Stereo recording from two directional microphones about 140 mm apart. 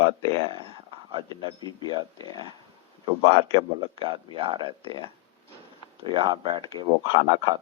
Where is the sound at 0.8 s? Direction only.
35° right (ahead or behind).